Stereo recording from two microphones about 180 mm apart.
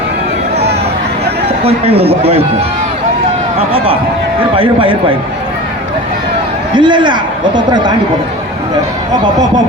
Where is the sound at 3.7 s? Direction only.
30° right (ahead or behind).